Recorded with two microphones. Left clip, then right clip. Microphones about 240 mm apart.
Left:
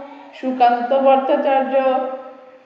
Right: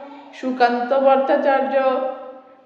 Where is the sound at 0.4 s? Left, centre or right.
Centre.